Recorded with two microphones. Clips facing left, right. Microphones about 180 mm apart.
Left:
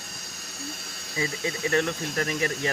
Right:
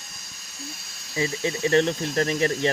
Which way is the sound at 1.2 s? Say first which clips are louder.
Right 4 dB; 25° right (ahead or behind).